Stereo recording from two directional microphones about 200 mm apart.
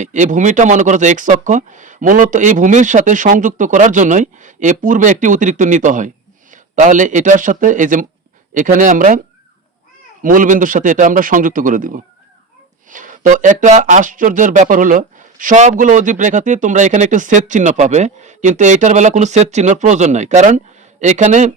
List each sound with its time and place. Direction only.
0.0 s speech: 40° right (ahead or behind)
10.2 s speech: 40° right (ahead or behind)